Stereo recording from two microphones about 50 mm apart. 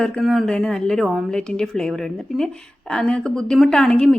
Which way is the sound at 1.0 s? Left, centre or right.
Centre.